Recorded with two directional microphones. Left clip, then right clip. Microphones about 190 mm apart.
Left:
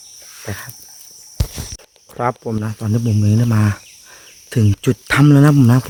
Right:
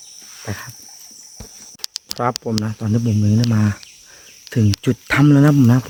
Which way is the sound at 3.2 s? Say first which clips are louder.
Left 1 dB; 25° left (ahead or behind).